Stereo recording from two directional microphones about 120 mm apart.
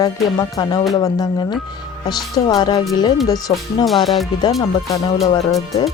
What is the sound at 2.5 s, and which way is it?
Music, 40° left (ahead or behind).